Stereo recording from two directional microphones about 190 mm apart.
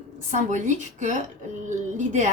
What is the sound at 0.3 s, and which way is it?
Speech, 40° right (ahead or behind).